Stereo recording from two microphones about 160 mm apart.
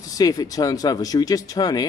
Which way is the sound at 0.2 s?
25° left (ahead or behind).